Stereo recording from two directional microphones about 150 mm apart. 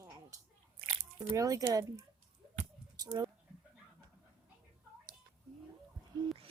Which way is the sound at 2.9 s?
25° right (ahead or behind).